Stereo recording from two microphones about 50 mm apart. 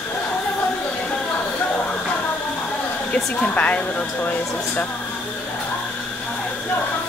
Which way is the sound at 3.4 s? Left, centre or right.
Left.